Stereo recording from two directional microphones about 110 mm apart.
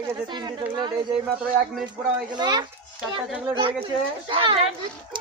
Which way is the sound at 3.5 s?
50° right (ahead or behind).